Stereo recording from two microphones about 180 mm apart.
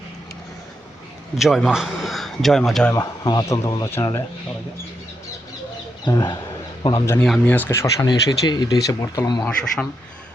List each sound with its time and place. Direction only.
1.4 s a man's voice: centre (ahead or behind)
2.9 s speech: 20° left (ahead or behind)
6.1 s speech: 20° left (ahead or behind)